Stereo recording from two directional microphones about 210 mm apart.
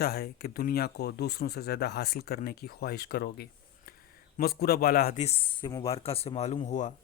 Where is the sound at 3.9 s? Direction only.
45° left (ahead or behind).